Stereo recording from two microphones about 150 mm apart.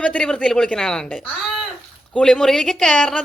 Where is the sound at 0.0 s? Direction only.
5° left (ahead or behind).